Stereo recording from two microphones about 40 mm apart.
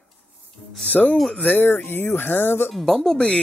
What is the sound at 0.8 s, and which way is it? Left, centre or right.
Speech, left.